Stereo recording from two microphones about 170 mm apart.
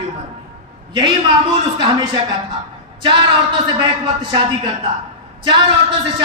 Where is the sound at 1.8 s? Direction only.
25° right (ahead or behind).